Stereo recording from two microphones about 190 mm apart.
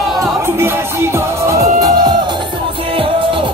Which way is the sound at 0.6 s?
15° right (ahead or behind).